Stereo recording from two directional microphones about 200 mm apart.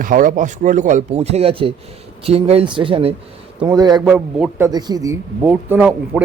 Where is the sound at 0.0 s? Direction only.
40° right (ahead or behind); by 4.0 s 20° right (ahead or behind).